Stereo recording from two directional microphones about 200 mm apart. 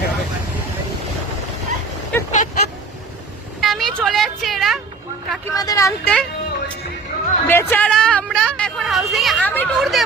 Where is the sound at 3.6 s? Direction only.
Centre (ahead or behind).